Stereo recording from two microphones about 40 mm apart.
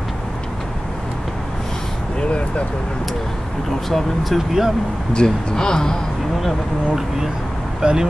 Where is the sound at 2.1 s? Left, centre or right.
Left.